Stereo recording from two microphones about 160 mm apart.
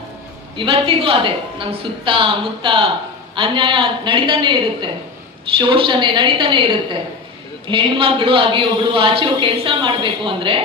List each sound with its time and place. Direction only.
0.5 s a man's voice: 30° right (ahead or behind)
7.7 s a man's voice: 35° right (ahead or behind)